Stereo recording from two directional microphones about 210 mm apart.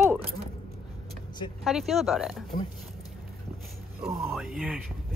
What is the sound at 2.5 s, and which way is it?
Speech, 40° left (ahead or behind).